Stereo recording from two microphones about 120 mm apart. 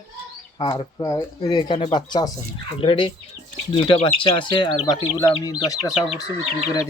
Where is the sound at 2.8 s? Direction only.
50° left (ahead or behind).